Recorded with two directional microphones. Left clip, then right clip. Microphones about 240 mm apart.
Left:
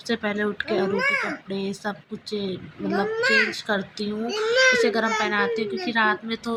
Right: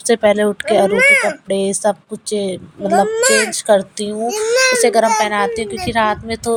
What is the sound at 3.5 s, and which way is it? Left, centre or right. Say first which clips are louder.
Speech: right 13 dB; right.